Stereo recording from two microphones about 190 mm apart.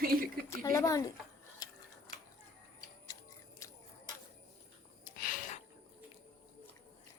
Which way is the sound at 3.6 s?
15° left (ahead or behind).